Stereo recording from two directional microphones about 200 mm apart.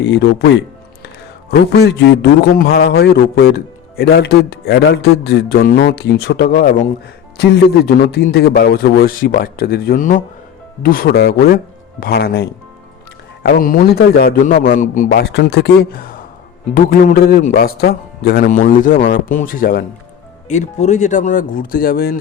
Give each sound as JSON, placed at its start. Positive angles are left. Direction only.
{"t": 0.0, "sound": "a man's voice", "side_deg": 60}
{"t": 20.5, "sound": "speech", "side_deg": 35}